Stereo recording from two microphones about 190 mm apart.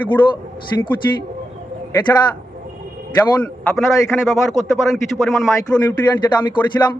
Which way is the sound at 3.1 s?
5° left (ahead or behind).